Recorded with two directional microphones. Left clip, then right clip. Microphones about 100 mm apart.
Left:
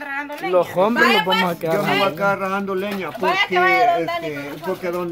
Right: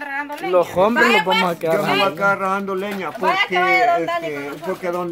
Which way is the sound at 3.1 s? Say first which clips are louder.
Even; centre (ahead or behind).